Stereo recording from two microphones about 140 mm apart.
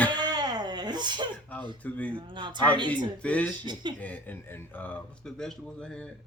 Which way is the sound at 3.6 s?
30° right (ahead or behind).